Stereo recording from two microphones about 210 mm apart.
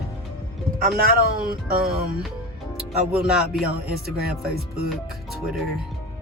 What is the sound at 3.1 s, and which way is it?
Speech, 5° right (ahead or behind).